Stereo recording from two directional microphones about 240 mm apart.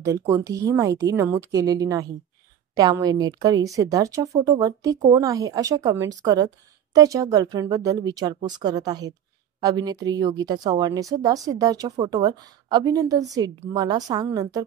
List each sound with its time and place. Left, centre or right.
0.0 s a woman's voice: centre